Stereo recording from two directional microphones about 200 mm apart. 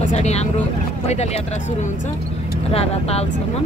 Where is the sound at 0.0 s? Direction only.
35° left (ahead or behind).